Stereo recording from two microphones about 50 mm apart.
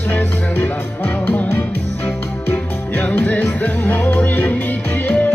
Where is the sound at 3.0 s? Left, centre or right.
Left.